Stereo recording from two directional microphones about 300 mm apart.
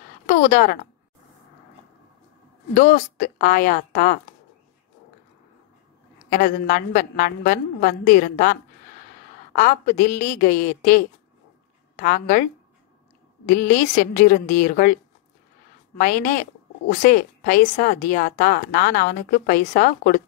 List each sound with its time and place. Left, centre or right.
0.4 s a woman's voice: left
2.7 s a woman's voice: left
6.3 s a woman's voice: left
12.0 s a woman's voice: left
13.5 s a woman's voice: left
16.0 s a woman's voice: left